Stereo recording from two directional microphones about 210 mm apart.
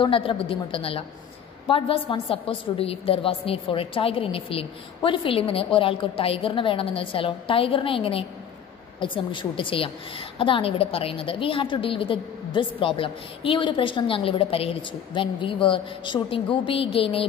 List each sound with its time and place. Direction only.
0.0 s a woman's voice: 25° left (ahead or behind)